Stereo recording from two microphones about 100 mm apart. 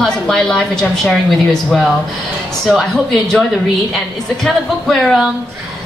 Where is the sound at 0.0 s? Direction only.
5° left (ahead or behind).